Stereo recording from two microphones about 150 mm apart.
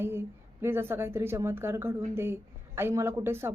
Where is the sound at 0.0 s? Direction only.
15° right (ahead or behind).